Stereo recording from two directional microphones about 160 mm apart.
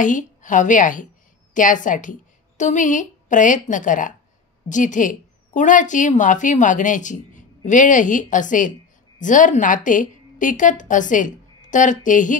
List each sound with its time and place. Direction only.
0.0 s a woman's voice: 50° left (ahead or behind)